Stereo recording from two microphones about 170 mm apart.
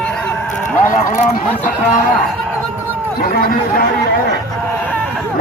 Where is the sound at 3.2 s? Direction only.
60° left (ahead or behind).